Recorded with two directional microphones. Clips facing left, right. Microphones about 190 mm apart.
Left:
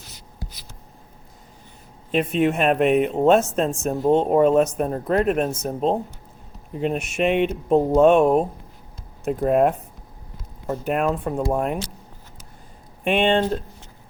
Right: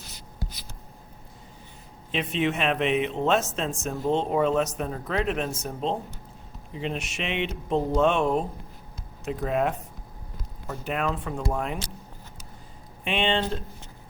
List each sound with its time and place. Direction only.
2.1 s speech: 50° left (ahead or behind)
13.1 s speech: 50° left (ahead or behind)